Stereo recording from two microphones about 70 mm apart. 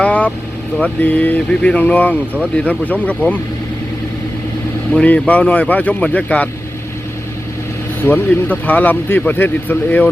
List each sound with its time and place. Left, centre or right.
0.0 s vehicle: left
0.8 s speech: left
4.9 s speech: left
8.0 s speech: left